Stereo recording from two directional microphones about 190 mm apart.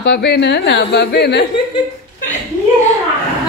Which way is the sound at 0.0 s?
60° left (ahead or behind).